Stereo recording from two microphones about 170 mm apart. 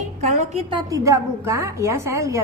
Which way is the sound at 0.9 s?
20° right (ahead or behind).